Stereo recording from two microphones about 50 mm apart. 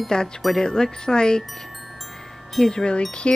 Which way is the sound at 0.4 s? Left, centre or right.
Centre.